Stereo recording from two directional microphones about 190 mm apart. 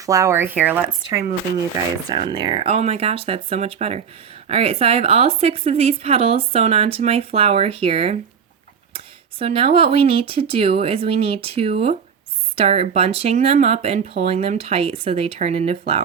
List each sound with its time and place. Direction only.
0.0 s speech: 15° right (ahead or behind)
2.0 s a woman's voice: 25° right (ahead or behind)
9.4 s a woman's voice: 30° right (ahead or behind)